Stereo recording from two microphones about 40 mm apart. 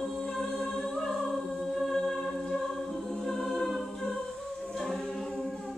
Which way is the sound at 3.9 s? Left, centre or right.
Left.